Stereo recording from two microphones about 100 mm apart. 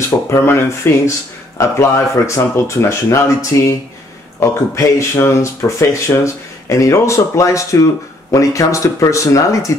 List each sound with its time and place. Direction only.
0.3 s speech: 25° left (ahead or behind)